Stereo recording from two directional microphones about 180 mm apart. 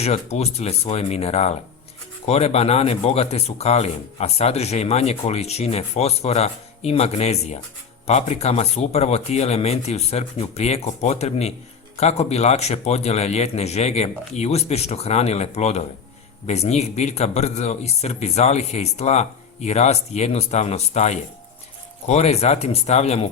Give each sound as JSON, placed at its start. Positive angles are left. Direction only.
{"t": 0.0, "sound": "speech", "side_deg": 35}